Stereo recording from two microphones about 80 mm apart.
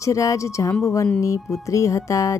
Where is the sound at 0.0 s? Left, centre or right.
Left.